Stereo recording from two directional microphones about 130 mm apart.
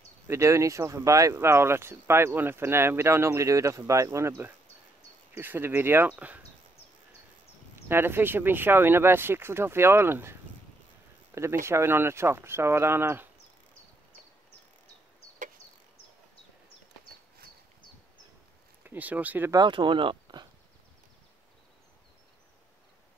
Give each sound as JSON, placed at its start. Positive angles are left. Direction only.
{"t": 0.3, "sound": "speech", "side_deg": -20}
{"t": 7.9, "sound": "speech", "side_deg": -15}
{"t": 11.3, "sound": "speech", "side_deg": -20}
{"t": 18.9, "sound": "speech", "side_deg": -10}
{"t": 19.5, "sound": "speech", "side_deg": -35}